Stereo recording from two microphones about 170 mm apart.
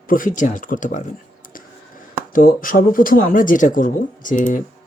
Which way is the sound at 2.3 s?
55° left (ahead or behind).